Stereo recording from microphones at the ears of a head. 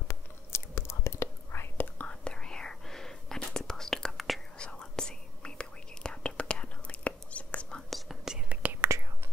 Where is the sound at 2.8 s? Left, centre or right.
Centre.